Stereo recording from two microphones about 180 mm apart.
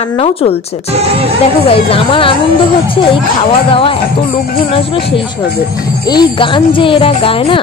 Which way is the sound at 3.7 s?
30° left (ahead or behind).